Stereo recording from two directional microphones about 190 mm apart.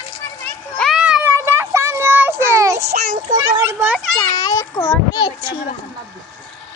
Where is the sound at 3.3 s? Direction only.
15° right (ahead or behind).